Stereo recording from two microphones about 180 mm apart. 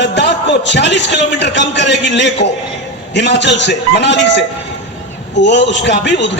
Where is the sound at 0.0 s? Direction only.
75° left (ahead or behind).